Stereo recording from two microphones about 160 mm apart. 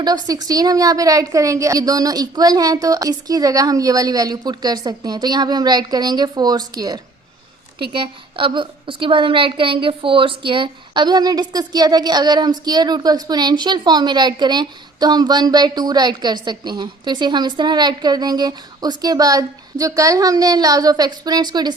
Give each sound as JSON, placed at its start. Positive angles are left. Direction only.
{"t": 0.0, "sound": "a woman's voice", "side_deg": -25}